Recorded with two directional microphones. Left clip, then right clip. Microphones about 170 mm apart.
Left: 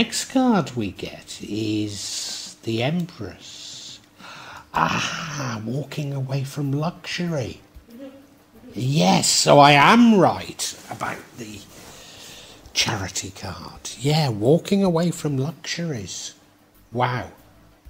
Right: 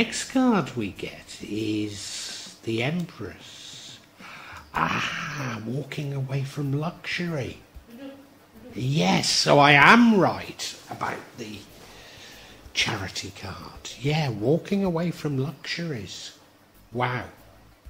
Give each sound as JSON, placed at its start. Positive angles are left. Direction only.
{"t": 0.0, "sound": "speech", "side_deg": 35}
{"t": 8.7, "sound": "speech", "side_deg": 30}
{"t": 12.7, "sound": "speech", "side_deg": 30}